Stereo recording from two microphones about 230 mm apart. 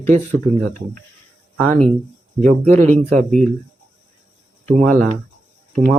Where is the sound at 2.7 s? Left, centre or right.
Right.